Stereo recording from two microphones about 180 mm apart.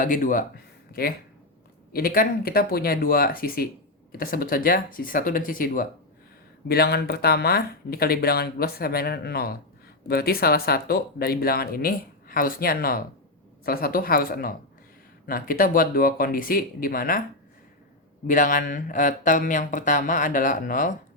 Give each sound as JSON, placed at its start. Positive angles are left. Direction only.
{"t": 0.0, "sound": "speech", "side_deg": 50}
{"t": 6.7, "sound": "speech", "side_deg": 60}
{"t": 18.3, "sound": "speech", "side_deg": 45}